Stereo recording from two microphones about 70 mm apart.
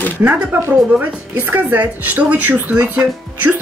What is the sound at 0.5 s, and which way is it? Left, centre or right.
A woman's voice, right.